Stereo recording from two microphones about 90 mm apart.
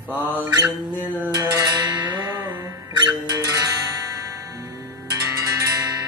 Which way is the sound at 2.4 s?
25° right (ahead or behind).